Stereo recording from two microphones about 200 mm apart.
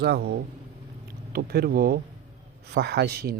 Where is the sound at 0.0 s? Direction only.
55° right (ahead or behind).